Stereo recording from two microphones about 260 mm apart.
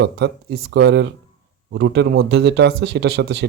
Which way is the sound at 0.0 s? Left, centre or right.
Right.